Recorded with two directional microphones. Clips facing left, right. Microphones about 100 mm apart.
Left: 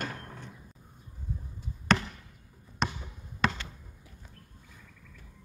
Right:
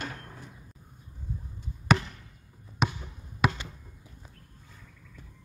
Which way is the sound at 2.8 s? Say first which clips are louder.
Right 2 dB; 5° right (ahead or behind).